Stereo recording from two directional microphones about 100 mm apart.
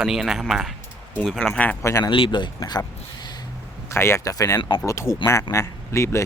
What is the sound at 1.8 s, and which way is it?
Speech, 30° left (ahead or behind).